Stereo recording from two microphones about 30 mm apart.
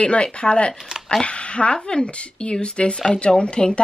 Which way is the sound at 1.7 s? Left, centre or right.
Left.